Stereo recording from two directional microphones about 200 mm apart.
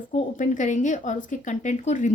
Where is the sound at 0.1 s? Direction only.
40° left (ahead or behind).